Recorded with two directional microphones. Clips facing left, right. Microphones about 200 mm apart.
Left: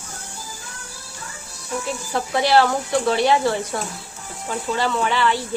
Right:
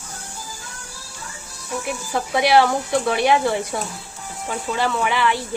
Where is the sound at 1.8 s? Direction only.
15° right (ahead or behind).